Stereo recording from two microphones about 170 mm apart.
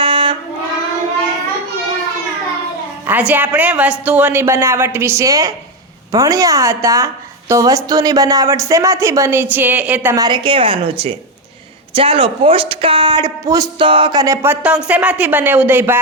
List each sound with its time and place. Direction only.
0.0 s a sound: 30° right (ahead or behind)
3.1 s a woman's voice: 10° right (ahead or behind)
10.2 s a woman's voice: 25° right (ahead or behind)
11.9 s a man's voice: 30° right (ahead or behind)
13.7 s a woman's voice: 30° right (ahead or behind); by 16.0 s 10° right (ahead or behind)